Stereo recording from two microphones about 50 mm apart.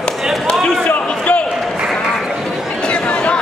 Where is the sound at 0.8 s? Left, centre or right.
Left.